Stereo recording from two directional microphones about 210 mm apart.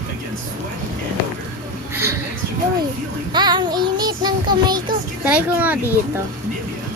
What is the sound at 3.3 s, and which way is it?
Child singing, 20° right (ahead or behind).